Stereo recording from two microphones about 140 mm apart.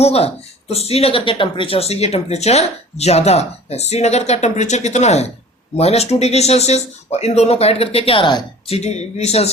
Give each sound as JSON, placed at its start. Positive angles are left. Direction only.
{"t": 0.0, "sound": "speech", "side_deg": 45}